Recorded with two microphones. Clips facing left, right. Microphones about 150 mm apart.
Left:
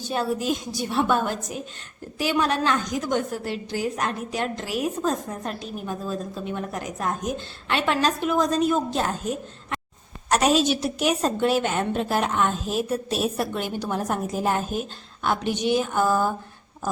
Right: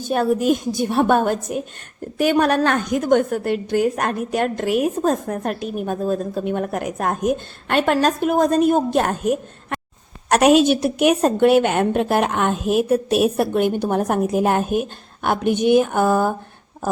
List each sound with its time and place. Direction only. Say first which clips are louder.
0.0 s a woman's voice: right 7 dB; 55° right (ahead or behind)